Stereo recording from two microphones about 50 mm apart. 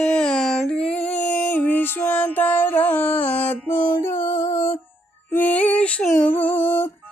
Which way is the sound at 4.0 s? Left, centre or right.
Left.